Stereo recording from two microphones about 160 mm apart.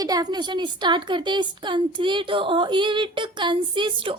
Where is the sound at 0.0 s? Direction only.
25° right (ahead or behind).